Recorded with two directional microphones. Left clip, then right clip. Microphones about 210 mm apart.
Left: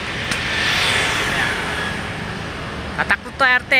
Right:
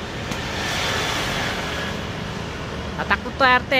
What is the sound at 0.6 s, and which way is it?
Vehicle, 45° right (ahead or behind).